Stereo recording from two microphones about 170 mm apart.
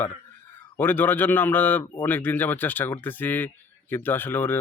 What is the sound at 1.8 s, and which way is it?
Speech, 25° left (ahead or behind).